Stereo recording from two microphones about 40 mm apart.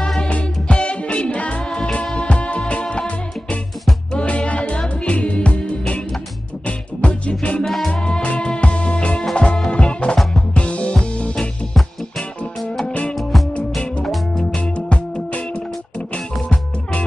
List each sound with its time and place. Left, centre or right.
0.3 s music: left
1.7 s music: left
7.6 s music: centre
7.9 s music: left
13.1 s music: centre
14.5 s music: left